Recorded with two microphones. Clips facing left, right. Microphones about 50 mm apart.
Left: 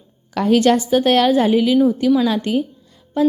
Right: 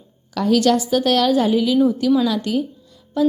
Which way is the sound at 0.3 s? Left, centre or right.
Left.